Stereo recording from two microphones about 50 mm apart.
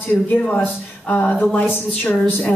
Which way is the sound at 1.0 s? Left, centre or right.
Left.